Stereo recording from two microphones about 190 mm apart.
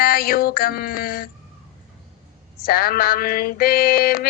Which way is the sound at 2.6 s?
50° left (ahead or behind).